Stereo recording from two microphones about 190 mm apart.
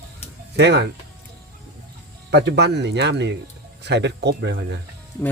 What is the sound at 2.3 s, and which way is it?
Speech, 60° right (ahead or behind).